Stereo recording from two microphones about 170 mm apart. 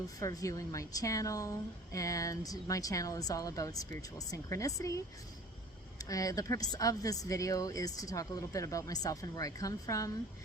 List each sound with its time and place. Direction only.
0.2 s a woman's voice: 20° left (ahead or behind)